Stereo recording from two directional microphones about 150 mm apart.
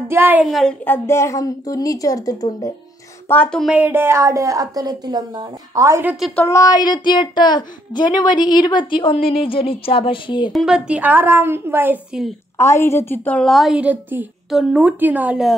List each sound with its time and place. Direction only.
0.1 s a woman's voice: 10° right (ahead or behind)
0.5 s a woman's voice: centre (ahead or behind)
0.8 s a woman's voice: 15° left (ahead or behind)
3.3 s a woman's voice: 10° left (ahead or behind)
3.7 s a woman's voice: 10° right (ahead or behind)
6.0 s a woman's voice: centre (ahead or behind)
6.3 s a woman's voice: 20° left (ahead or behind)
10.5 s a woman's voice: 5° right (ahead or behind)
12.5 s a woman's voice: 20° left (ahead or behind); by 15.5 s 5° right (ahead or behind)